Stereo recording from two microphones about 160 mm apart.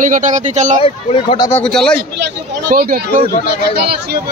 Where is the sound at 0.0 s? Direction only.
55° right (ahead or behind).